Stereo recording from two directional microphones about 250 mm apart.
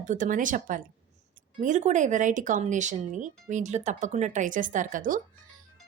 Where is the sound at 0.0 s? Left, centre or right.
Right.